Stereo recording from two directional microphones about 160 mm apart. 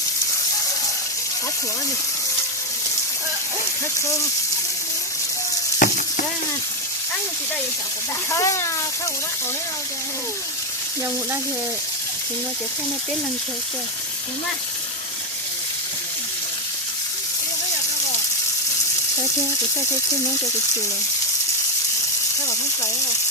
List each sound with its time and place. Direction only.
5.8 s frying: 55° left (ahead or behind)
8.3 s speech: 20° left (ahead or behind)